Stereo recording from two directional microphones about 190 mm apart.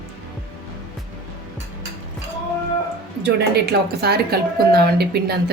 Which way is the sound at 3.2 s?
55° right (ahead or behind).